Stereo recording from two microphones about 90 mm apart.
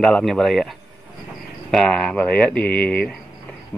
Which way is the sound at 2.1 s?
15° left (ahead or behind).